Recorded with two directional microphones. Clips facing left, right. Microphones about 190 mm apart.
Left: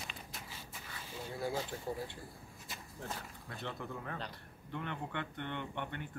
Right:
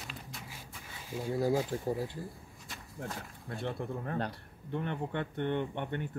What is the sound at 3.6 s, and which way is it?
Speech, 40° right (ahead or behind).